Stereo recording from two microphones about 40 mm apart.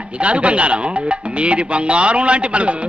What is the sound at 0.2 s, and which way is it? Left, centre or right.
A man's voice, right.